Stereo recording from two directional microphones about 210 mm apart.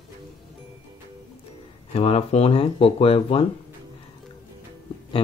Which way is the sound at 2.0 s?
30° left (ahead or behind).